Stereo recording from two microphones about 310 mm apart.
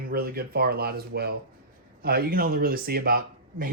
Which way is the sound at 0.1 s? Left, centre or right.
Right.